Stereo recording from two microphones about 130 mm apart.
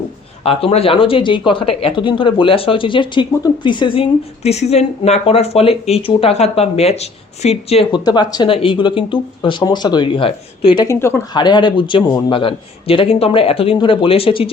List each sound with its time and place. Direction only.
0.4 s a man's voice: 45° left (ahead or behind)
7.9 s a man's voice: 35° left (ahead or behind)
10.8 s speech: 20° left (ahead or behind)
11.3 s a man's voice: 35° left (ahead or behind)